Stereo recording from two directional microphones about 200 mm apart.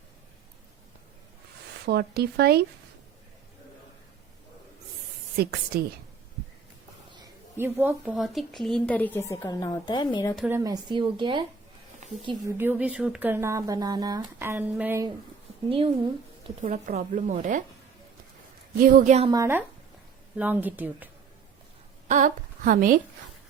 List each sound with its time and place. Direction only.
1.9 s speech: 50° right (ahead or behind)
5.4 s speech: 50° right (ahead or behind)
7.1 s a woman's voice: 15° right (ahead or behind); by 10.3 s 25° left (ahead or behind)
10.3 s speech: 5° right (ahead or behind)
10.6 s speech: 20° right (ahead or behind)
12.5 s speech: 10° right (ahead or behind)
16.6 s speech: 35° right (ahead or behind)
18.8 s speech: 45° right (ahead or behind)
19.3 s speech: 15° right (ahead or behind)
22.0 s a woman's voice: 40° right (ahead or behind)